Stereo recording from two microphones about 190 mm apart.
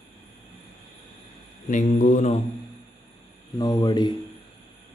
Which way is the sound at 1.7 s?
40° left (ahead or behind).